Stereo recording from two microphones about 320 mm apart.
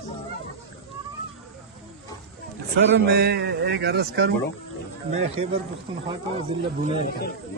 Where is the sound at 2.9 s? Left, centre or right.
Right.